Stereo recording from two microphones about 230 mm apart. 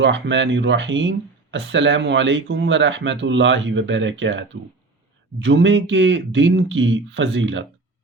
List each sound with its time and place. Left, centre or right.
0.0 s speech: right